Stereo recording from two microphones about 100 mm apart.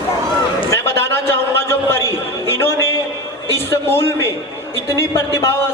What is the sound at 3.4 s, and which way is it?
Speech, 25° left (ahead or behind).